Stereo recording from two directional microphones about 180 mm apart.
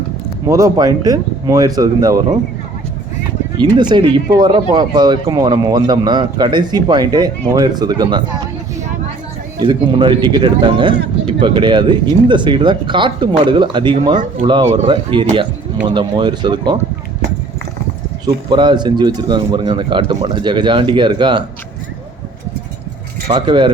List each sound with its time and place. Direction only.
0.4 s speech: 20° right (ahead or behind)
3.6 s speech: 25° right (ahead or behind)
9.6 s speech: 25° right (ahead or behind)
18.5 s speech: 25° right (ahead or behind)
23.3 s speech: 25° right (ahead or behind)